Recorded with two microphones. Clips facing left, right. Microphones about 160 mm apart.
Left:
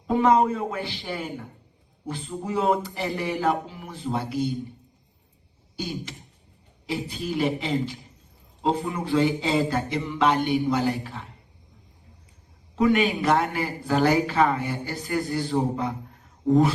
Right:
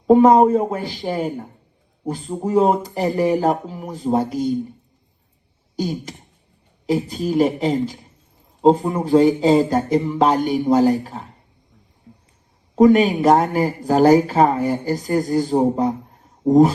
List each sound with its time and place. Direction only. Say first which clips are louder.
0.1 s speech: right 9 dB; 40° right (ahead or behind)
5.7 s throat clearing: right 8 dB; 40° right (ahead or behind)
6.8 s speech: right 9 dB; 40° right (ahead or behind)
12.7 s speech: right 8 dB; 40° right (ahead or behind)